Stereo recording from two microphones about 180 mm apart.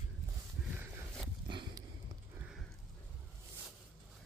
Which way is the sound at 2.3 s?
5° right (ahead or behind).